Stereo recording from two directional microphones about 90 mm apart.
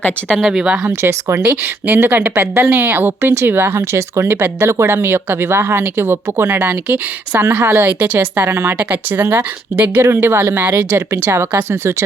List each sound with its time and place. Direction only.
0.3 s speech: 5° right (ahead or behind)
0.9 s speech: 25° right (ahead or behind)